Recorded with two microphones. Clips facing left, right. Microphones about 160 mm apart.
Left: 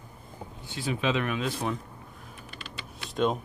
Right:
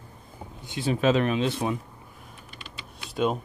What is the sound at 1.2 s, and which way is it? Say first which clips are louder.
Speech: right 5 dB; 25° right (ahead or behind).